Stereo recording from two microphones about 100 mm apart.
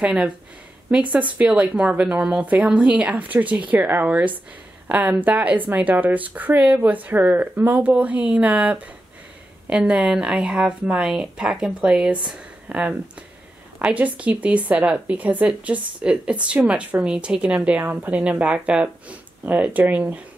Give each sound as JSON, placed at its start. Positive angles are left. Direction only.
{"t": 0.0, "sound": "a woman's voice", "side_deg": -10}